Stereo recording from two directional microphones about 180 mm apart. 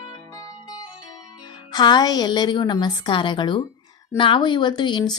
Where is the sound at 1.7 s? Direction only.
25° left (ahead or behind).